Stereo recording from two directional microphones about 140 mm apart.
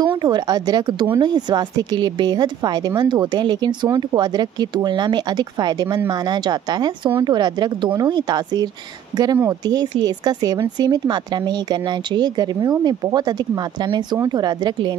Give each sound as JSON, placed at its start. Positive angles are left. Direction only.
{"t": 0.0, "sound": "speech", "side_deg": -35}